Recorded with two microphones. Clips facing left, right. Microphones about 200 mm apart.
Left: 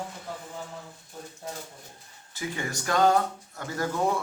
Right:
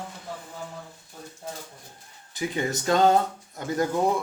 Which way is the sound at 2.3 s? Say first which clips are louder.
Right 5 dB; 20° right (ahead or behind).